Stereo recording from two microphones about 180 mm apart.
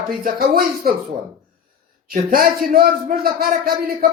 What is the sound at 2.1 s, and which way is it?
A man's voice, 55° right (ahead or behind).